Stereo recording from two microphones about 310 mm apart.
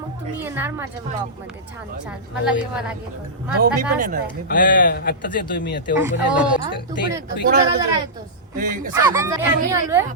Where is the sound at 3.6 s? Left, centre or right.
Right.